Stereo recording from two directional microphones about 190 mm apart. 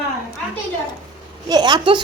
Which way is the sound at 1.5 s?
20° right (ahead or behind).